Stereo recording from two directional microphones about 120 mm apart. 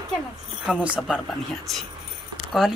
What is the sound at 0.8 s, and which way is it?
Speech, 10° right (ahead or behind).